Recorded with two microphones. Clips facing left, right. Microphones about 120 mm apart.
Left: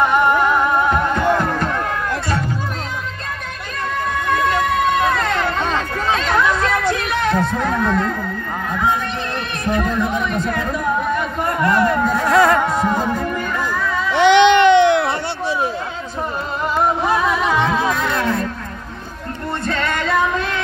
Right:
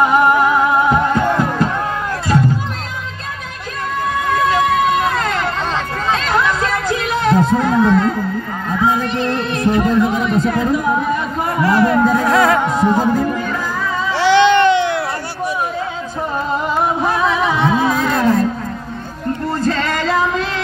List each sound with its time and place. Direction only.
0.0 s music: 10° right (ahead or behind)
4.4 s vehicle: centre (ahead or behind)
7.3 s speech: 5° right (ahead or behind)
8.7 s a sound: centre (ahead or behind)
9.7 s speech: 5° right (ahead or behind)
11.4 s a sound: centre (ahead or behind)
12.8 s music: 10° right (ahead or behind)
14.1 s baby cry: 20° left (ahead or behind)
17.6 s music: 10° right (ahead or behind)
18.0 s a sound: 40° right (ahead or behind)
19.6 s music: 90° right